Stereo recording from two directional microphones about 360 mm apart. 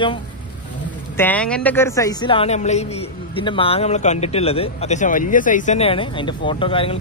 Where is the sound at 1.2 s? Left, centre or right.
Centre.